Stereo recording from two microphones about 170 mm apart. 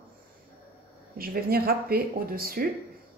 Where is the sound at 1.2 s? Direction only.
60° right (ahead or behind).